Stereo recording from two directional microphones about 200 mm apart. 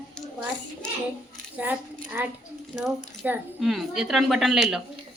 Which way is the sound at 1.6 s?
10° right (ahead or behind).